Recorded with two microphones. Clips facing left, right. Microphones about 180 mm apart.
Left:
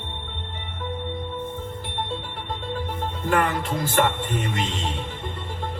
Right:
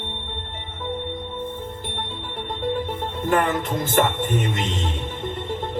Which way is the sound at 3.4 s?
25° right (ahead or behind).